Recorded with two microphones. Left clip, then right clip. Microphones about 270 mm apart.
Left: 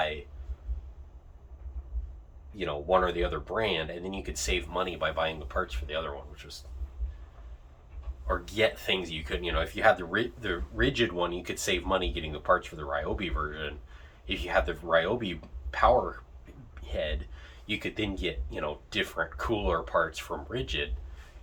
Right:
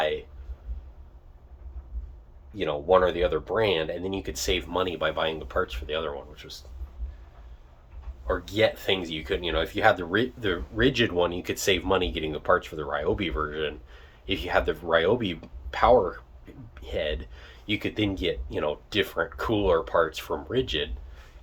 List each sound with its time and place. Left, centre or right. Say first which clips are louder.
2.6 s speech: right 5 dB; right
8.3 s speech: right 3 dB; right